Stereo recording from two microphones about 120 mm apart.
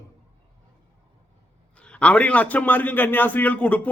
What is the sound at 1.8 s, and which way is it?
A man's voice, 10° left (ahead or behind).